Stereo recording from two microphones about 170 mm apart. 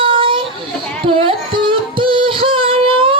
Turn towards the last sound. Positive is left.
turn(degrees=-30)  # may be behind; listen again after turning